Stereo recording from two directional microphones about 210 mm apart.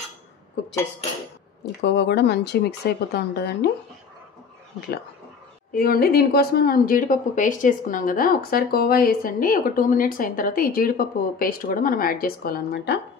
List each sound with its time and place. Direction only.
1.8 s speech: 50° left (ahead or behind)
5.7 s speech: 45° left (ahead or behind)